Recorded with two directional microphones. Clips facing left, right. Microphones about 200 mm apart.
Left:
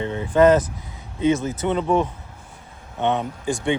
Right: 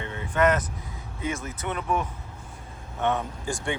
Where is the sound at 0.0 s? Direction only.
30° left (ahead or behind).